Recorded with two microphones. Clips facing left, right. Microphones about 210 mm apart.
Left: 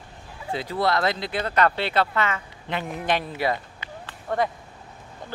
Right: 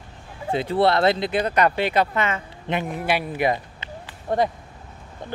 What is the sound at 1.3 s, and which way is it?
Speech, 15° right (ahead or behind).